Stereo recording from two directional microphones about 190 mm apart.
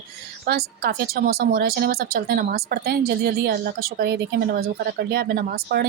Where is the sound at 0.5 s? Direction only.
60° right (ahead or behind).